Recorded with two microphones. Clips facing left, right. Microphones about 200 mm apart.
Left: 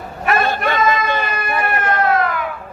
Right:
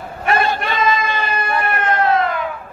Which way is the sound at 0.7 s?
55° left (ahead or behind).